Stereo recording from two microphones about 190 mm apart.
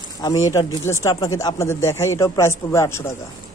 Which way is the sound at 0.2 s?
20° left (ahead or behind).